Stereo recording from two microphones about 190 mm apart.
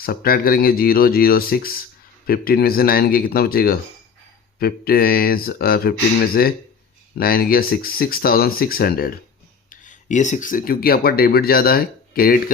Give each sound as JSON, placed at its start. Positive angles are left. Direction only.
{"t": 0.0, "sound": "speech", "side_deg": 50}